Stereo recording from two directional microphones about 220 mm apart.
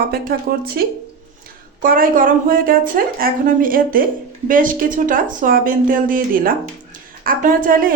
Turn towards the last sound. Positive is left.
turn(degrees=-40)  # may be behind; listen again after turning